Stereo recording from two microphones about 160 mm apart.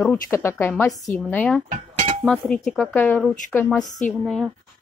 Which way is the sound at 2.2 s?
5° left (ahead or behind).